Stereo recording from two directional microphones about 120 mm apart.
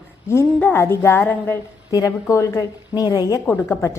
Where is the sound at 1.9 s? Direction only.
30° left (ahead or behind).